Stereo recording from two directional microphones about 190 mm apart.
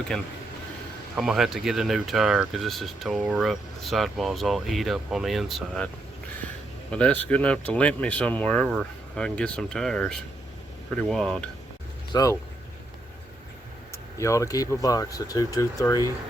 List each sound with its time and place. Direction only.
1.1 s speech: centre (ahead or behind)
6.9 s speech: 5° left (ahead or behind)
12.1 s speech: 15° left (ahead or behind)
14.2 s speech: 15° left (ahead or behind)